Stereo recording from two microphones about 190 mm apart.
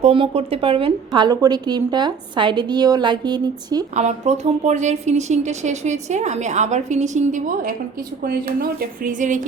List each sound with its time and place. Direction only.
0.0 s a woman's voice: 30° right (ahead or behind)
3.9 s a woman's voice: 35° right (ahead or behind)